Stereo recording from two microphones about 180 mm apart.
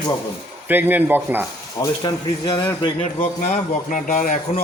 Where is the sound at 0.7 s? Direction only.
10° right (ahead or behind).